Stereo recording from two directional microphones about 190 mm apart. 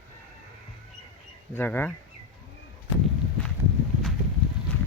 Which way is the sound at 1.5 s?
10° left (ahead or behind).